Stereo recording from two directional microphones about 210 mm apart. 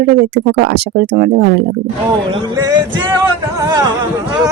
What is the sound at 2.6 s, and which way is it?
Music, 15° right (ahead or behind).